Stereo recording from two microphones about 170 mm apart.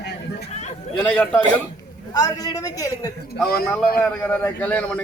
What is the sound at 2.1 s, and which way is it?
A man's voice, 20° left (ahead or behind).